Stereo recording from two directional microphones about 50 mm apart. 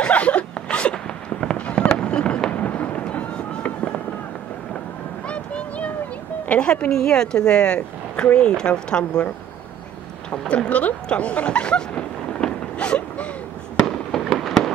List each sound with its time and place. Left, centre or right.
0.0 s zipper: left
2.0 s fireworks: centre
2.5 s fireworks: left
5.3 s a sound: left
6.5 s a woman's voice: left
10.5 s a sound: left
14.3 s fireworks: centre